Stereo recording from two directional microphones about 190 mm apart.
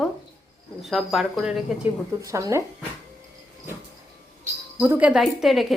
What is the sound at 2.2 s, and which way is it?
Speech, 15° right (ahead or behind).